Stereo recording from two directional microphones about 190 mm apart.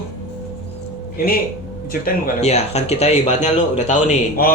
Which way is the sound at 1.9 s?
50° left (ahead or behind).